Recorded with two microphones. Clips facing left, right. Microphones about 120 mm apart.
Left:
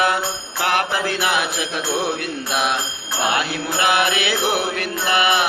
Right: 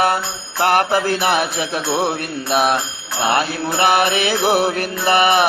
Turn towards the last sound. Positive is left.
turn(degrees=-45)  # may be behind; listen again after turning